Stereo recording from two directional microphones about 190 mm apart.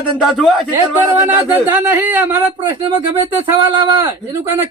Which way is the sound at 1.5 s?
10° right (ahead or behind).